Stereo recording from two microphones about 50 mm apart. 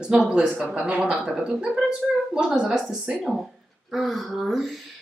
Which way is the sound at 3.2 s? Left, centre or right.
Centre.